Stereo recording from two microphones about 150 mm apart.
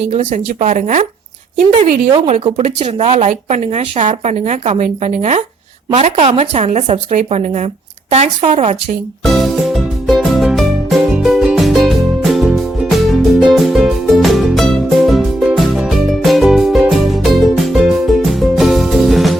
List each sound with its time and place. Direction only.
0.1 s speech: 50° right (ahead or behind)
2.8 s speech: 45° right (ahead or behind)
9.2 s music: centre (ahead or behind)